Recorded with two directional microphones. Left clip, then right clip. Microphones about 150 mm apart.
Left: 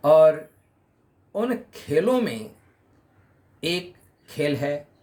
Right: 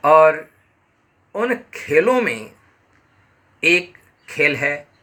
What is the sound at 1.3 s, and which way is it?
Speech, 40° left (ahead or behind).